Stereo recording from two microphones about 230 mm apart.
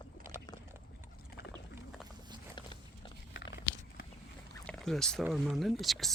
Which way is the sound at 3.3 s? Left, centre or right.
Left.